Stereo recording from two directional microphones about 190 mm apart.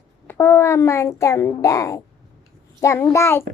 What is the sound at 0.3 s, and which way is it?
A child's voice, 15° left (ahead or behind).